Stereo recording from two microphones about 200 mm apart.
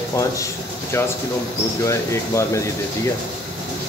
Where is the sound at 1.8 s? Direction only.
15° left (ahead or behind).